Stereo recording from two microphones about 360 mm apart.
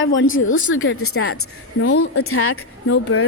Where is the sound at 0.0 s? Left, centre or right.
Left.